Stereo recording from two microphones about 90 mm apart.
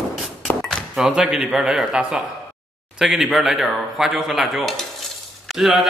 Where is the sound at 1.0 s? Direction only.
5° right (ahead or behind).